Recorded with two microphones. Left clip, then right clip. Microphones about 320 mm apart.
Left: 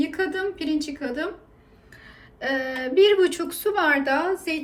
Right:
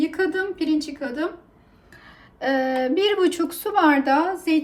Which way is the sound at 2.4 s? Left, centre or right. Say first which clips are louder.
Right 4 dB; right.